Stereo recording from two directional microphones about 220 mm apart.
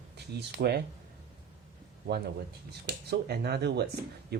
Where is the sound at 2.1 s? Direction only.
50° right (ahead or behind).